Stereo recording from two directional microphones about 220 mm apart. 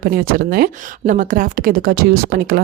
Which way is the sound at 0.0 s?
40° right (ahead or behind).